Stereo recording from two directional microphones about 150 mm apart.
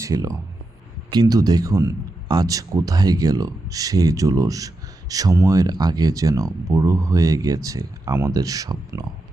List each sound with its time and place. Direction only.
0.0 s speech: 25° right (ahead or behind)